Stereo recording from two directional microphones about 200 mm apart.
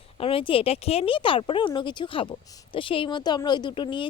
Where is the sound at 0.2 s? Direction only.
25° left (ahead or behind).